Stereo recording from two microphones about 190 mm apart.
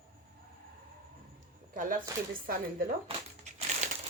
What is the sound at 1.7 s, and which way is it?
Speech, 45° right (ahead or behind).